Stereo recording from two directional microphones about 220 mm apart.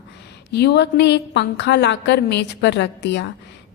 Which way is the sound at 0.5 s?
50° left (ahead or behind).